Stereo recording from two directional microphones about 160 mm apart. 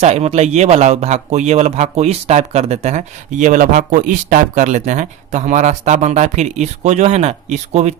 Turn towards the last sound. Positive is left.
turn(degrees=-45)  # may be behind; listen again after turning